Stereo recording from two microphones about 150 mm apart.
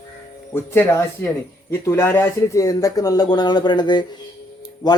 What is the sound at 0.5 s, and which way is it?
A man's voice, 15° left (ahead or behind).